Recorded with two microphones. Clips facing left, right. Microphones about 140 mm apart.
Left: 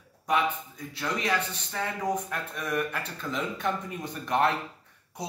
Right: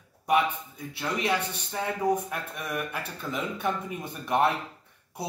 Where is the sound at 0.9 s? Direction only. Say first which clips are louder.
Right 1 dB; 15° right (ahead or behind).